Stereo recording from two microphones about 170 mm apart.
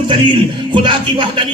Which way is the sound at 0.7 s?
30° right (ahead or behind).